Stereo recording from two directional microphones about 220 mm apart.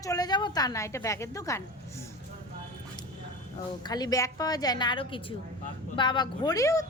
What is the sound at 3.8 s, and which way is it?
A woman's voice, 20° left (ahead or behind).